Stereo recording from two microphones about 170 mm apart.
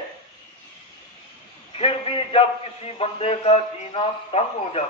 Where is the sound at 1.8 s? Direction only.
35° left (ahead or behind).